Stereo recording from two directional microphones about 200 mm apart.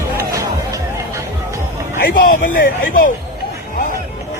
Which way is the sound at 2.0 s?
45° left (ahead or behind).